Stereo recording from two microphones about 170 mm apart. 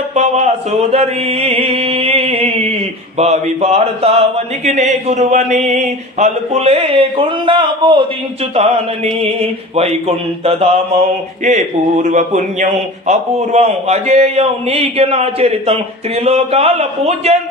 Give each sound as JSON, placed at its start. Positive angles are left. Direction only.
{"t": 0.1, "sound": "mantra", "side_deg": -40}
{"t": 3.2, "sound": "a man's voice", "side_deg": -40}
{"t": 11.4, "sound": "a man's voice", "side_deg": -45}